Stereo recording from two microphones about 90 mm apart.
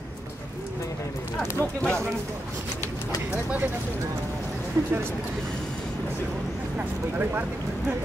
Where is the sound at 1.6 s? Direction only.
10° left (ahead or behind).